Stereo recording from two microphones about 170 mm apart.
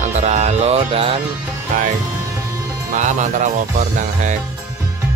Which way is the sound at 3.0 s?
45° right (ahead or behind).